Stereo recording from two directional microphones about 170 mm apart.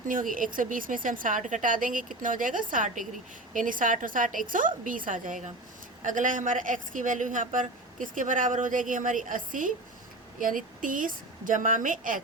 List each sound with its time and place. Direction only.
0.1 s a woman's voice: 55° right (ahead or behind)
10.8 s a woman's voice: 50° right (ahead or behind)